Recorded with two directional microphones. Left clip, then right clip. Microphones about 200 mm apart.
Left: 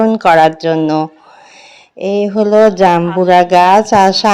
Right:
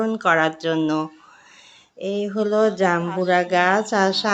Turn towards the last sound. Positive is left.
turn(degrees=35)  # may be behind; listen again after turning